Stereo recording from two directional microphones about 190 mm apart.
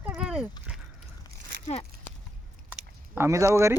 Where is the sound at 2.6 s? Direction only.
10° right (ahead or behind).